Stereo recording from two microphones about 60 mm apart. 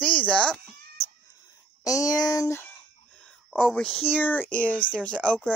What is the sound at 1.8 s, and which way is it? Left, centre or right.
Speech, left.